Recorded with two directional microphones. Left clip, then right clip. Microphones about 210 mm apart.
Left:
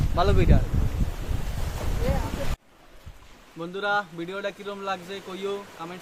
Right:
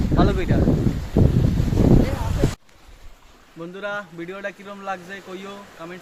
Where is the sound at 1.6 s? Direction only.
50° left (ahead or behind).